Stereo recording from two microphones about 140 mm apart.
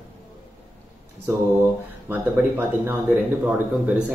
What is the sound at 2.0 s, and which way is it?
Speech, 15° right (ahead or behind).